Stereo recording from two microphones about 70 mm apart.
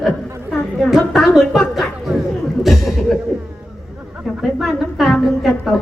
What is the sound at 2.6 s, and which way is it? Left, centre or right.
Chuckle, centre.